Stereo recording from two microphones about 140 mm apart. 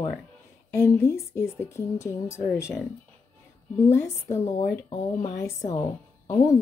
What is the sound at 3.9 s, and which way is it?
Speech, 20° left (ahead or behind).